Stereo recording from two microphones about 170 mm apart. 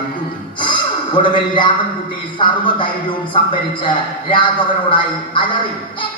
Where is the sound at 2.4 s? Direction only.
30° left (ahead or behind).